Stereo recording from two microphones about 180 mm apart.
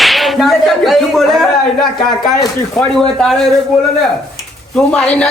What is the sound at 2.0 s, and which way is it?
Speech, 25° left (ahead or behind).